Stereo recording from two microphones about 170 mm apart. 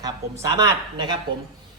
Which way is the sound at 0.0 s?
20° right (ahead or behind).